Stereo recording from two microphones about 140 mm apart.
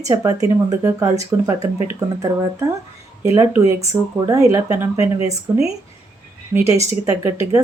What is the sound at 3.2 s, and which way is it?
Speech, 20° right (ahead or behind).